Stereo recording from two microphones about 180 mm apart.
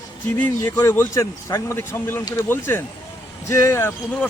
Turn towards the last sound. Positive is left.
turn(degrees=10)  # may be behind; listen again after turning